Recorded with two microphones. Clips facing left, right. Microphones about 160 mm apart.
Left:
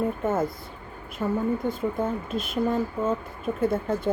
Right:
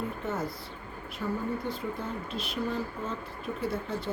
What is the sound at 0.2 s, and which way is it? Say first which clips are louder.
Speech: left 8 dB; 50° left (ahead or behind).